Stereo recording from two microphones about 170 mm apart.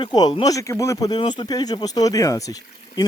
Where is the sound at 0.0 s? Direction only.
25° left (ahead or behind).